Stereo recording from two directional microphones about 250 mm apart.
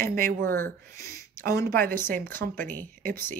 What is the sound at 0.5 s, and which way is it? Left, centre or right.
Speech, centre.